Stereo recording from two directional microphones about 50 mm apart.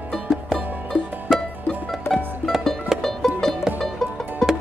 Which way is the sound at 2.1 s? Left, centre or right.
Left.